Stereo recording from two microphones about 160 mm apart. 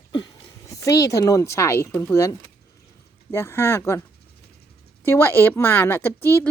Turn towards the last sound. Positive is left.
turn(degrees=15)  # may be behind; listen again after turning